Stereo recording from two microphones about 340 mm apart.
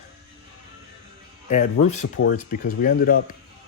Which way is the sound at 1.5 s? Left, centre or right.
Left.